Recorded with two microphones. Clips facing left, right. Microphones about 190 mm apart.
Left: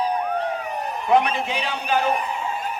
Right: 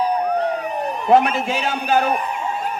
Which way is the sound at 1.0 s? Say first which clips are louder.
Right 4 dB; 45° right (ahead or behind).